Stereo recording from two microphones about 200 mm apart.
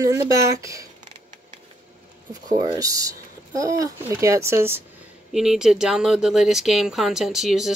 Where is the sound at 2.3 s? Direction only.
20° right (ahead or behind); by 7.7 s centre (ahead or behind).